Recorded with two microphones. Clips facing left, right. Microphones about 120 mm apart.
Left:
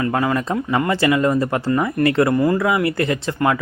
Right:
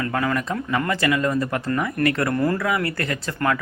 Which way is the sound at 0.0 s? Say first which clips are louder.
Left 4 dB; 25° left (ahead or behind).